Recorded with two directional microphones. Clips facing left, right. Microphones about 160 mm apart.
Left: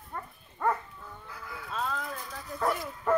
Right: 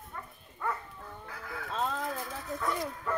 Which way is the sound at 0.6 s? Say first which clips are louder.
Left 6 dB; 50° left (ahead or behind).